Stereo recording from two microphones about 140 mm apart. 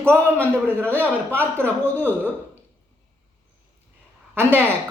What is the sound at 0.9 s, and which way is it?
A woman's voice, 15° right (ahead or behind).